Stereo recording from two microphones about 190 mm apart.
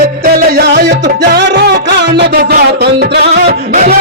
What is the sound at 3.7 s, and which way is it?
Music, 45° right (ahead or behind).